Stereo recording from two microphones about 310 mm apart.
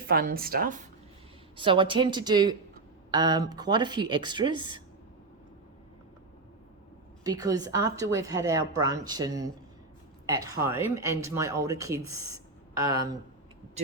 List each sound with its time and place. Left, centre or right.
0.1 s speech: right
1.5 s a woman's voice: centre
7.3 s a woman's voice: centre